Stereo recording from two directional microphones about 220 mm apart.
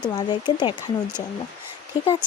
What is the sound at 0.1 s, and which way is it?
Speech, 20° left (ahead or behind).